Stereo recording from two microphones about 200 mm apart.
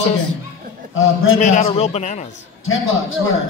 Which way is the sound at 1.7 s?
30° left (ahead or behind).